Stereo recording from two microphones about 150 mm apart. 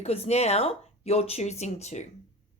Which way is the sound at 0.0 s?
45° left (ahead or behind).